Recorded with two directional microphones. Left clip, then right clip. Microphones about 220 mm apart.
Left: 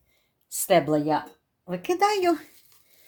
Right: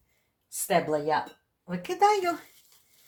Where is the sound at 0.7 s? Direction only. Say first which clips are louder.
Left 4 dB; 50° left (ahead or behind).